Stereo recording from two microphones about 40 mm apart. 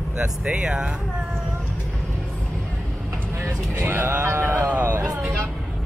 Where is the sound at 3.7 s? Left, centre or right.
Right.